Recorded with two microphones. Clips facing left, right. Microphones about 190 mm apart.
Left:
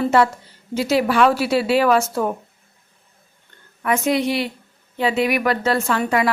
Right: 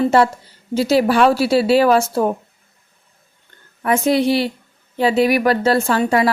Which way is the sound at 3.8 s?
35° right (ahead or behind).